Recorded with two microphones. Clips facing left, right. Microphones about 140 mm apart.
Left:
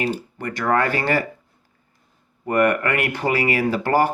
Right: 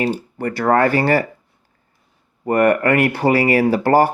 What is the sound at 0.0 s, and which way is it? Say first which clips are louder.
Speech: right 4 dB; 35° right (ahead or behind).